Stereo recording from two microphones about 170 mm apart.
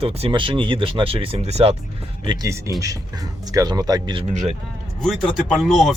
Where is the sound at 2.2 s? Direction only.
25° right (ahead or behind).